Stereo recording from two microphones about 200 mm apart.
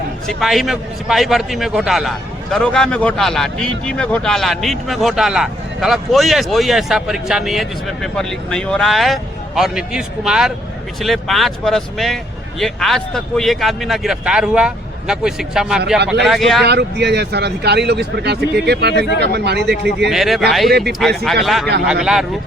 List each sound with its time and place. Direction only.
0.3 s a man's voice: centre (ahead or behind)
16.6 s speech: 55° right (ahead or behind)
20.1 s a man's voice: centre (ahead or behind)